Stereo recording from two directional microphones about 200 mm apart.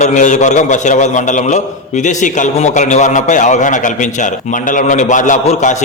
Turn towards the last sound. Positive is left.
turn(degrees=40)  # may be behind; listen again after turning